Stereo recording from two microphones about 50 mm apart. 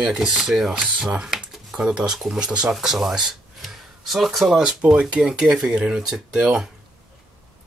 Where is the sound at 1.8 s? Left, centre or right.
Centre.